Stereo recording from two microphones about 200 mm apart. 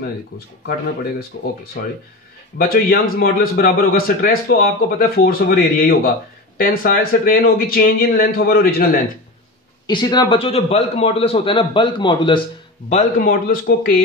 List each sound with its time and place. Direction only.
1.3 s a man's voice: 45° left (ahead or behind)
9.8 s a man's voice: 20° left (ahead or behind)
12.9 s a man's voice: 45° left (ahead or behind)